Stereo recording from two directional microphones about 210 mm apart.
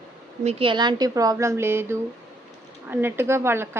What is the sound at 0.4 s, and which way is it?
A woman's voice, 25° right (ahead or behind).